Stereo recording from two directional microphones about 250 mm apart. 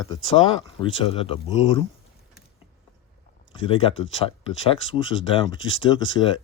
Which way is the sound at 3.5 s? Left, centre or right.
Left.